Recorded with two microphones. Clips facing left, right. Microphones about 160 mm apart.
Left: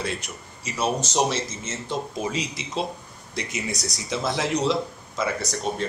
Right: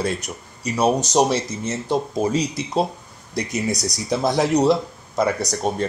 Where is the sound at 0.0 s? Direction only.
40° right (ahead or behind).